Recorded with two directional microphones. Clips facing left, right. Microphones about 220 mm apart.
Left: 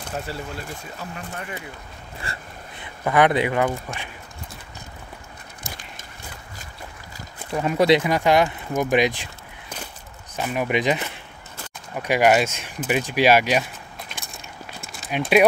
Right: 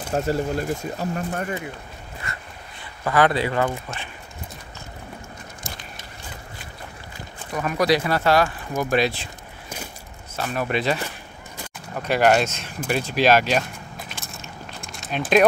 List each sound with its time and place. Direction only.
0.1 s speech: 45° right (ahead or behind)
2.3 s dog: 30° left (ahead or behind)
3.0 s speech: 20° left (ahead or behind)
7.5 s speech: 25° left (ahead or behind)
10.3 s speech: 15° left (ahead or behind)
13.9 s a sound: centre (ahead or behind)